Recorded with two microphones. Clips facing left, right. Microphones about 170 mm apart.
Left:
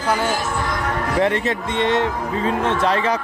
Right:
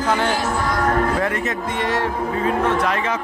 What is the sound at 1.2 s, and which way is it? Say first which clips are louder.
Speech: left 3 dB; 25° left (ahead or behind).